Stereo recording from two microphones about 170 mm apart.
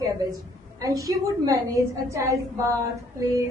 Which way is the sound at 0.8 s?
20° right (ahead or behind).